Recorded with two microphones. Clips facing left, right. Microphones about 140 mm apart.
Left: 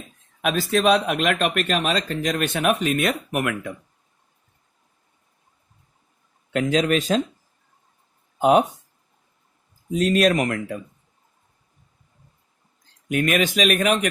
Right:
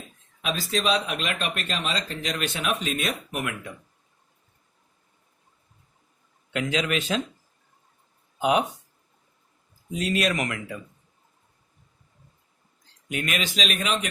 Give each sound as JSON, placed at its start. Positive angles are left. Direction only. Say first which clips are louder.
{"t": 0.4, "sound": "speech", "louder": "left 7 dB", "side_deg": 55}
{"t": 6.5, "sound": "a man's voice", "louder": "left 6 dB", "side_deg": 40}
{"t": 8.4, "sound": "speech", "louder": "left 6 dB", "side_deg": 45}
{"t": 10.0, "sound": "speech", "louder": "left 7 dB", "side_deg": 45}
{"t": 13.1, "sound": "speech", "louder": "left 8 dB", "side_deg": 50}